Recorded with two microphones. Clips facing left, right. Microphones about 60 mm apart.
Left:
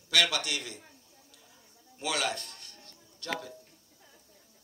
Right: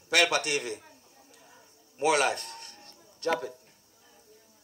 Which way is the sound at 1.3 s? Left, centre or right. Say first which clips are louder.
Right 4 dB; right.